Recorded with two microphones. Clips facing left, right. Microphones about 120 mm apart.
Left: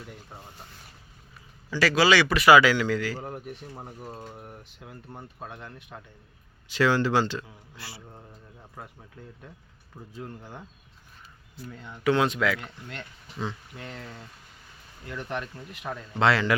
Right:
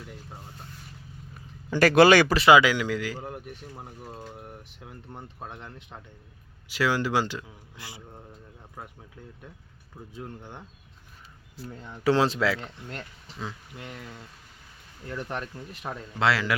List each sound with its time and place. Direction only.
1.7 s speech: 50° right (ahead or behind)
2.3 s speech: 25° right (ahead or behind)
3.2 s speech: centre (ahead or behind)
4.3 s speech: 5° right (ahead or behind)
5.5 s speech: 20° right (ahead or behind)
10.0 s speech: centre (ahead or behind)
12.0 s speech: 30° right (ahead or behind)
13.2 s speech: centre (ahead or behind)
13.7 s speech: 15° right (ahead or behind)
15.1 s speech: 35° right (ahead or behind)
15.9 s speech: 5° right (ahead or behind)